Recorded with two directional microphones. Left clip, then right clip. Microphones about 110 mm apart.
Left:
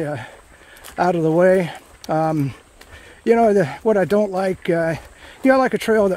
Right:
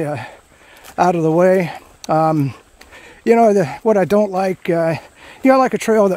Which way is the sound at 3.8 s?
40° right (ahead or behind).